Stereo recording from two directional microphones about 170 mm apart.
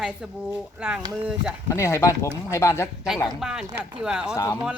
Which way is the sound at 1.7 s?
15° left (ahead or behind).